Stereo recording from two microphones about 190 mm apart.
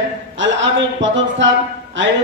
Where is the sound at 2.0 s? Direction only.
75° right (ahead or behind).